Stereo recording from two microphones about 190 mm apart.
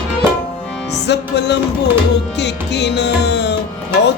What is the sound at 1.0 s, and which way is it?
Music, 65° left (ahead or behind).